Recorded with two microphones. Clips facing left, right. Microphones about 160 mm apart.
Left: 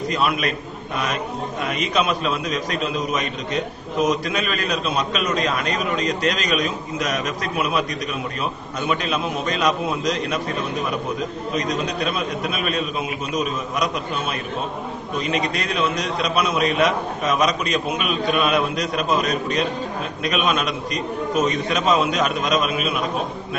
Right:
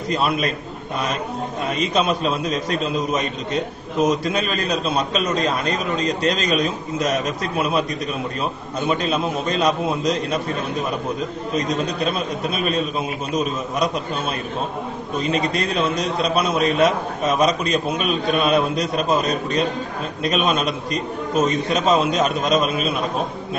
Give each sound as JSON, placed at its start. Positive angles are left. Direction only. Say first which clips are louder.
{"t": 0.1, "sound": "a man's voice", "louder": "right 3 dB", "side_deg": -30}
{"t": 1.7, "sound": "a man's voice", "louder": "right 2 dB", "side_deg": -30}
{"t": 8.8, "sound": "a man's voice", "louder": "right 2 dB", "side_deg": -35}
{"t": 11.5, "sound": "a man's voice", "louder": "right 2 dB", "side_deg": -35}
{"t": 15.2, "sound": "a man's voice", "louder": "right 3 dB", "side_deg": -30}